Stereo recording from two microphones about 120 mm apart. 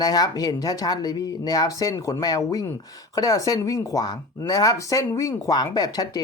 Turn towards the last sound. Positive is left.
turn(degrees=35)  # may be behind; listen again after turning